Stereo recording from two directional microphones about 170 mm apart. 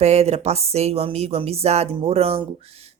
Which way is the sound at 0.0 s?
40° right (ahead or behind).